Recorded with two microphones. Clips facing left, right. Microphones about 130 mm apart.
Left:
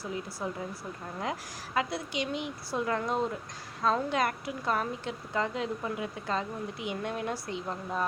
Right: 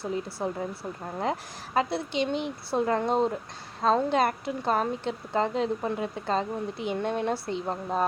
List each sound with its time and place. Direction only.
0.0 s a woman's voice: 25° right (ahead or behind)